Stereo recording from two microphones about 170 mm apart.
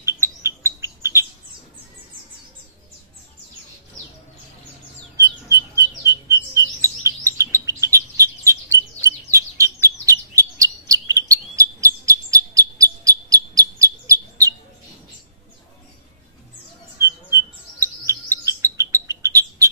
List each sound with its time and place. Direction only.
0.2 s bird: 15° right (ahead or behind)
5.2 s bird: 20° right (ahead or behind)
17.0 s bird: 15° right (ahead or behind)